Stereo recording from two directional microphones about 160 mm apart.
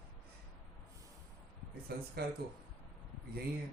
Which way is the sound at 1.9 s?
75° right (ahead or behind).